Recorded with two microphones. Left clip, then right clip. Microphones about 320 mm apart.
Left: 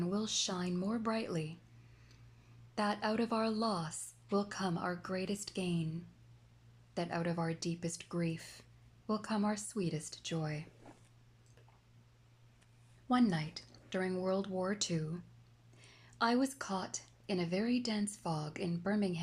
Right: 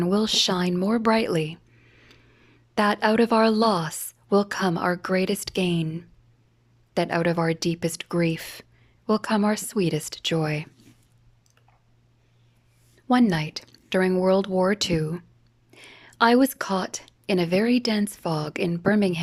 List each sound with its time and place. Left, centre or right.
0.0 s a woman's voice: right
2.0 s a sound: right
2.7 s a woman's voice: right
13.1 s a woman's voice: right